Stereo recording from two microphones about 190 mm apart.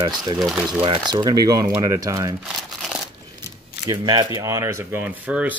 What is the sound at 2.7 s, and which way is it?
Crunch, centre (ahead or behind).